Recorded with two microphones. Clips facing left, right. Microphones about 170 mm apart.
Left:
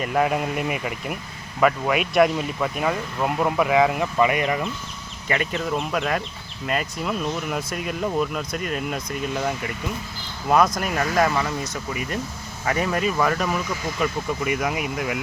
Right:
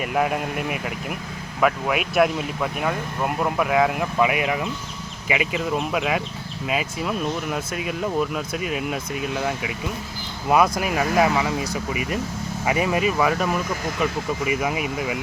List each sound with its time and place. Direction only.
0.0 s speech: 5° right (ahead or behind)